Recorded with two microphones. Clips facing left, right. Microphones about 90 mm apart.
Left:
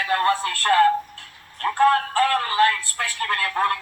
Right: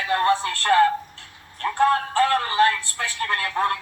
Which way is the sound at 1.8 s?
25° right (ahead or behind).